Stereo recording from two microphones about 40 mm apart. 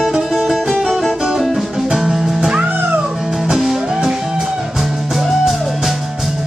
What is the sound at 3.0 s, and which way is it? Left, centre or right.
Music, centre.